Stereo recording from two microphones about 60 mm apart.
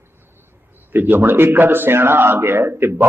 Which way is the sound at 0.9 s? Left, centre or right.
Right.